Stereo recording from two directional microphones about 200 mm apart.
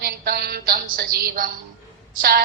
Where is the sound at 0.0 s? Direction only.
50° right (ahead or behind).